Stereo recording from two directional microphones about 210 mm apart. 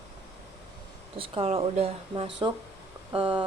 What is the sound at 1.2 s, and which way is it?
Speech, 25° right (ahead or behind).